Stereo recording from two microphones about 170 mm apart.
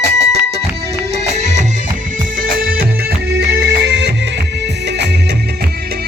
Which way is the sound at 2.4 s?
55° right (ahead or behind).